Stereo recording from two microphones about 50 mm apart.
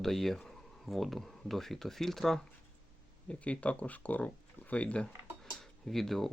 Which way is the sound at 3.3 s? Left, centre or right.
Left.